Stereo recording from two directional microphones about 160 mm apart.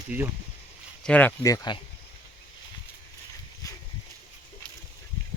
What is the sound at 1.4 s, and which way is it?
Speech, 20° left (ahead or behind).